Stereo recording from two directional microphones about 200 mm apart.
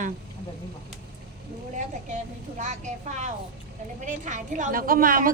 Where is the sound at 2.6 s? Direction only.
35° right (ahead or behind).